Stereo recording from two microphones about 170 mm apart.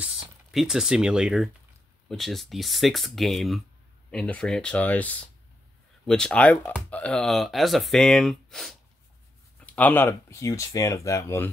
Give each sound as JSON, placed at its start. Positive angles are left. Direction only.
{"t": 0.0, "sound": "speech", "side_deg": 0}